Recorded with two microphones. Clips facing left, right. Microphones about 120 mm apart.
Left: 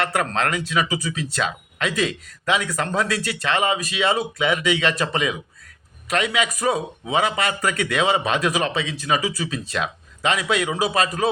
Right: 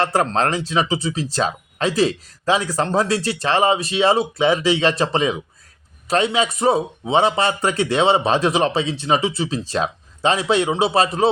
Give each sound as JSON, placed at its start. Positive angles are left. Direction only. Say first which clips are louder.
{"t": 0.0, "sound": "a man's voice", "louder": "right 4 dB", "side_deg": -30}